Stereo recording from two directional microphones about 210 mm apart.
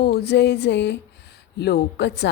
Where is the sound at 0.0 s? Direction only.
50° left (ahead or behind).